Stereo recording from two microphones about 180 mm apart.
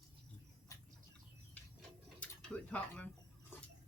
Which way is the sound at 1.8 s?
5° left (ahead or behind).